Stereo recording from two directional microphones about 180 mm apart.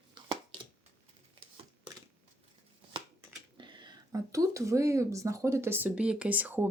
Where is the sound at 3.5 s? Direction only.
25° right (ahead or behind).